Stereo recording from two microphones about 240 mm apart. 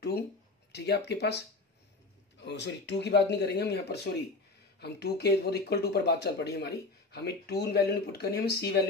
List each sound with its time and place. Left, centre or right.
0.7 s speech: left
2.4 s speech: left